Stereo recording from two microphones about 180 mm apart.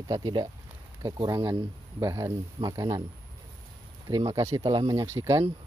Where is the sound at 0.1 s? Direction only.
25° right (ahead or behind).